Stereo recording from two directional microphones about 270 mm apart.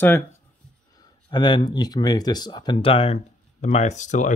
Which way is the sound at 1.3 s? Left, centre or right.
Centre.